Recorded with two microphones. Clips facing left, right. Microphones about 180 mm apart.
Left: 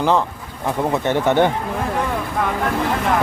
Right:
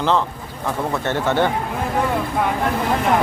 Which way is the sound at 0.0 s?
15° left (ahead or behind).